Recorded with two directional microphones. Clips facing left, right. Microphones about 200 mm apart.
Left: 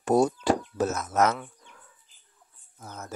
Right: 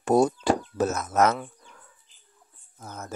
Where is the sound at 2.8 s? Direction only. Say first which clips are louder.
Right 2 dB; 45° right (ahead or behind).